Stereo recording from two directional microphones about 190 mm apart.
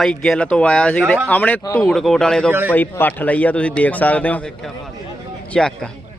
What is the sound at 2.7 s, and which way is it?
A man's voice, 10° left (ahead or behind).